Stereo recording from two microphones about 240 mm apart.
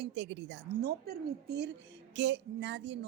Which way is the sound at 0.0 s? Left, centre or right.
Right.